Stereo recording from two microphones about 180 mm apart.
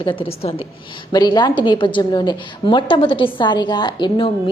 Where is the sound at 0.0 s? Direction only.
30° left (ahead or behind).